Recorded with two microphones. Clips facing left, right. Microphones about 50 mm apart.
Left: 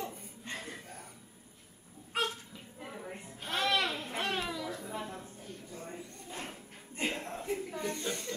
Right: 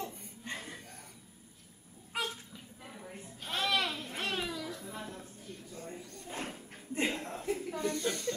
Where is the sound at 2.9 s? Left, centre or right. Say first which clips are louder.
Left 3 dB; centre.